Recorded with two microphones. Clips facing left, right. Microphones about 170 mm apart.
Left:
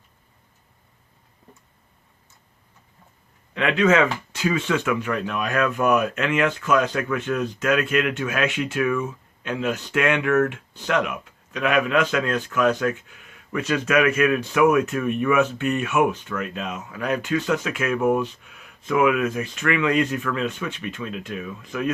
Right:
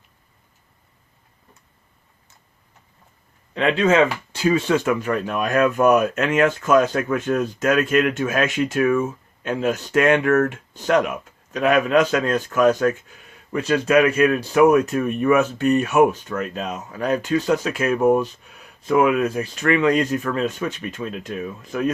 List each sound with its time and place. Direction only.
3.5 s speech: 30° right (ahead or behind)